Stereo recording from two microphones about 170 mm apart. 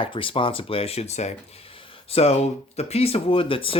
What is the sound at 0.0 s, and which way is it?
Speech, 30° left (ahead or behind).